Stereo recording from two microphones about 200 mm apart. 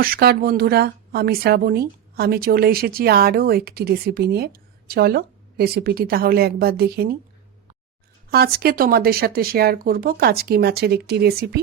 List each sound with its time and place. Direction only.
0.0 s speech: 50° right (ahead or behind)
8.3 s speech: 50° right (ahead or behind)